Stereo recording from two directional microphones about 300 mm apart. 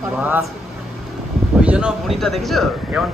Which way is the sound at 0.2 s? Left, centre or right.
Centre.